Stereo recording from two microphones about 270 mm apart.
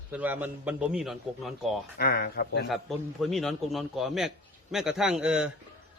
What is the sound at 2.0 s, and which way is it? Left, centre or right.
Speech, left.